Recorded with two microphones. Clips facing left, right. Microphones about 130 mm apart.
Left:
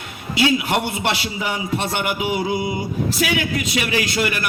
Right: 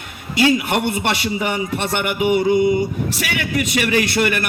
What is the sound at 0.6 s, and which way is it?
A man's voice, 55° right (ahead or behind).